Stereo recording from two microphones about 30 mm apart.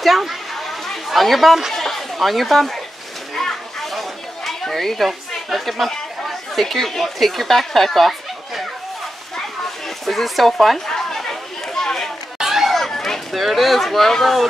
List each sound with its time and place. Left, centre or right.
0.6 s chatter: centre
1.7 s a sound: centre
2.1 s speech: centre
4.5 s speech: centre
6.2 s chatter: centre
6.8 s speech: centre
10.0 s speech: centre
10.9 s chatter: centre
12.4 s chatter: centre
12.7 s a sound: centre
13.3 s speech: centre